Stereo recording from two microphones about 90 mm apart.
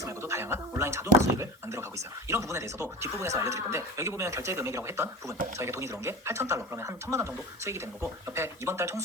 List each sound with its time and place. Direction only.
0.0 s speech: 30° right (ahead or behind)